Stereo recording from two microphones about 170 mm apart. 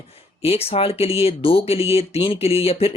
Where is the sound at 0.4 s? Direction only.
35° left (ahead or behind).